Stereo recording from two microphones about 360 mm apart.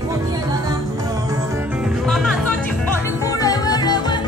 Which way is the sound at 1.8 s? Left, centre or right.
Centre.